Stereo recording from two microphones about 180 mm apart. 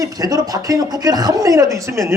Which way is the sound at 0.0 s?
20° right (ahead or behind).